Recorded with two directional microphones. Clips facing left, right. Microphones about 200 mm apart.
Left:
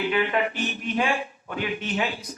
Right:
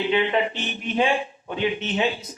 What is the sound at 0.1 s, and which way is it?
A man's voice, 25° right (ahead or behind).